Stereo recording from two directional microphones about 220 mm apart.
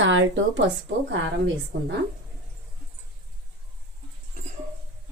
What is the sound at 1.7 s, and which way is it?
Speech, 50° right (ahead or behind).